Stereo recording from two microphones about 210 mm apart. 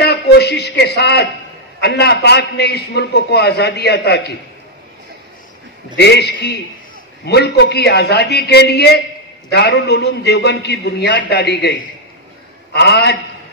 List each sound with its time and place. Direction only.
0.0 s a sound: 50° left (ahead or behind)
1.8 s a man's voice: 50° left (ahead or behind)
5.9 s a man's voice: 50° left (ahead or behind)